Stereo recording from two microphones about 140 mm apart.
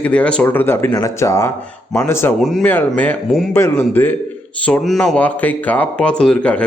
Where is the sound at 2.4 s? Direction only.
Centre (ahead or behind).